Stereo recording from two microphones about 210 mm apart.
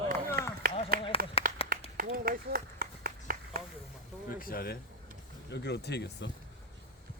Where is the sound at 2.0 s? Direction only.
45° right (ahead or behind).